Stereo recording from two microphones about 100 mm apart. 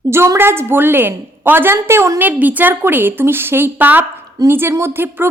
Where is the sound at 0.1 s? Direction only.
25° right (ahead or behind).